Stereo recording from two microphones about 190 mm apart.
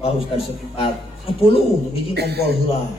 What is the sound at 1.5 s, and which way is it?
Speech, 30° left (ahead or behind).